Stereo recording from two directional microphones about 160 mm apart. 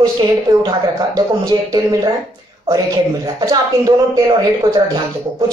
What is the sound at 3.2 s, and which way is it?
Speech, 20° right (ahead or behind).